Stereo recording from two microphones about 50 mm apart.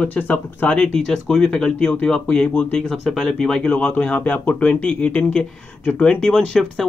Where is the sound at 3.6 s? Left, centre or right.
Centre.